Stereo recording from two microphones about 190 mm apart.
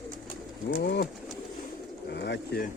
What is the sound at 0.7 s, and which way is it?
Speech, 60° left (ahead or behind).